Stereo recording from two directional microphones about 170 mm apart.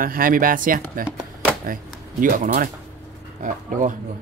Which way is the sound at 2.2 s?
55° right (ahead or behind).